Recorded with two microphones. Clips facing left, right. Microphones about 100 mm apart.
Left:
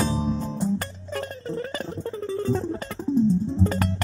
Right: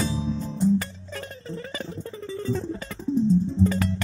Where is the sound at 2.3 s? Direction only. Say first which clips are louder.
Left 3 dB; 45° left (ahead or behind).